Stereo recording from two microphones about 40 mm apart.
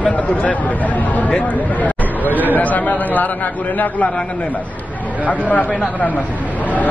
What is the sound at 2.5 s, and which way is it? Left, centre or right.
Speech, left.